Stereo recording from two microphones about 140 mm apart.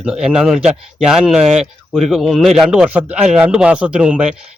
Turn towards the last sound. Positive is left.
turn(degrees=-5)  # may be behind; listen again after turning